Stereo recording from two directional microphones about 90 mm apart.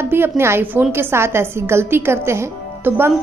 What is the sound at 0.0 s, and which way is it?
A woman's voice, 25° right (ahead or behind).